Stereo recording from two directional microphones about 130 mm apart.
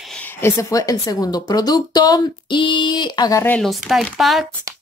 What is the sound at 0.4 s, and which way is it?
A woman's voice, 25° left (ahead or behind).